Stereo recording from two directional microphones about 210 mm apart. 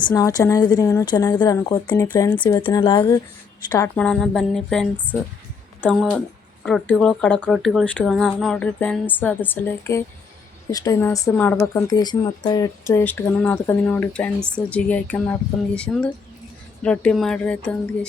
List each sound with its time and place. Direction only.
0.0 s a woman's voice: 20° left (ahead or behind)